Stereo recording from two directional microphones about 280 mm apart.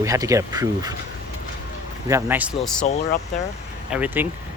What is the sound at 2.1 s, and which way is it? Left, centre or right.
Speech, centre.